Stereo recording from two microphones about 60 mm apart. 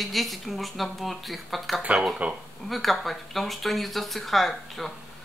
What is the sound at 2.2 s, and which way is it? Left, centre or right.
Speech, right.